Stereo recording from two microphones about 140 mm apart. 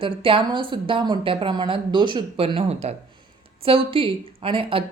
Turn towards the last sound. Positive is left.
turn(degrees=-40)  # may be behind; listen again after turning